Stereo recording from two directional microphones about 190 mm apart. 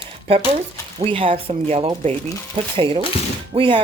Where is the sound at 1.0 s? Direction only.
30° right (ahead or behind).